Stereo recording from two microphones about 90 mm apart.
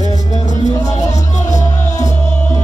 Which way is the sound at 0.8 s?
40° left (ahead or behind).